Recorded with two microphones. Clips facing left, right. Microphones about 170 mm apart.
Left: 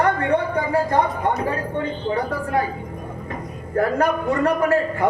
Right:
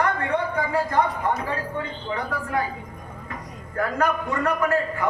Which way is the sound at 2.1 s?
35° left (ahead or behind).